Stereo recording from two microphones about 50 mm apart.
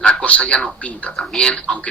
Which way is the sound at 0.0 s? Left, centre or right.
Centre.